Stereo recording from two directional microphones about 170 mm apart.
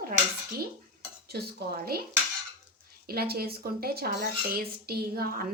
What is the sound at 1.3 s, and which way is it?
Speech, 70° right (ahead or behind).